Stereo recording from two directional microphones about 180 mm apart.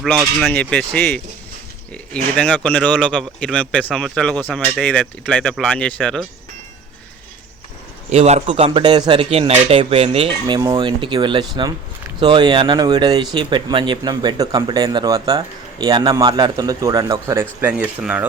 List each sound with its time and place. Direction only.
0.3 s speech: centre (ahead or behind)
2.3 s speech: 10° left (ahead or behind)
8.1 s speech: 35° right (ahead or behind); by 17.4 s 20° right (ahead or behind)
17.6 s speech: 10° right (ahead or behind)